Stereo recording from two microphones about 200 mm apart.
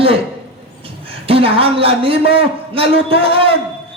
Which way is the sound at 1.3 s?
30° right (ahead or behind).